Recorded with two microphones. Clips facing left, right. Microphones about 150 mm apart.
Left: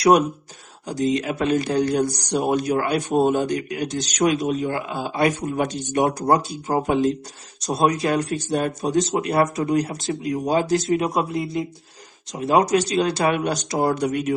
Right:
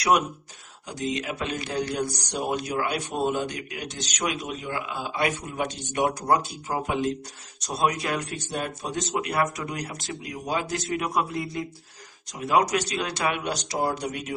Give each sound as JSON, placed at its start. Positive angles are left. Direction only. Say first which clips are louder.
{"t": 0.9, "sound": "speech", "louder": "left 8 dB", "side_deg": 40}